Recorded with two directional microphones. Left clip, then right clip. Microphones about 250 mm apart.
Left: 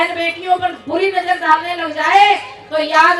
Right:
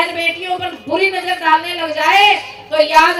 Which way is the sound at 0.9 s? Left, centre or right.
Right.